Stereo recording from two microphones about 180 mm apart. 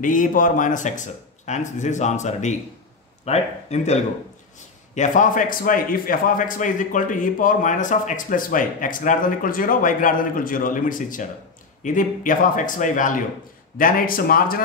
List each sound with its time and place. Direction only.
0.0 s a man's voice: 45° left (ahead or behind)